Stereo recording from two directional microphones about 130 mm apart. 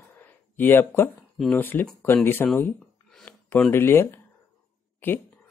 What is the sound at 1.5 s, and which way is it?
Speech, 15° left (ahead or behind).